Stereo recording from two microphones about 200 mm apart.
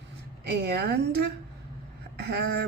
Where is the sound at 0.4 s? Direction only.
55° right (ahead or behind).